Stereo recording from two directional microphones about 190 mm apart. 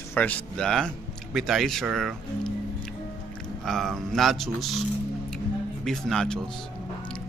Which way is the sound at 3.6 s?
Centre (ahead or behind).